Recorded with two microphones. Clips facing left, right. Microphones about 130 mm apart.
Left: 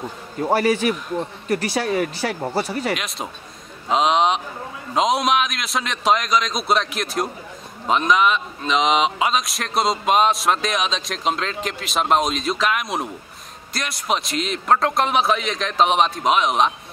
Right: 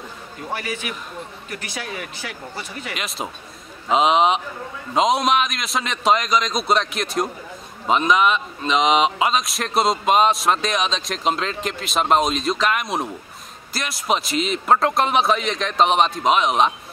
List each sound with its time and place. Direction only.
0.4 s speech: 35° left (ahead or behind)
3.9 s a man's voice: centre (ahead or behind)